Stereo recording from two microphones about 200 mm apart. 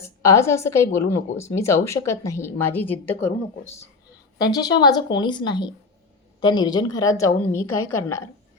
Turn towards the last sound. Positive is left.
turn(degrees=90)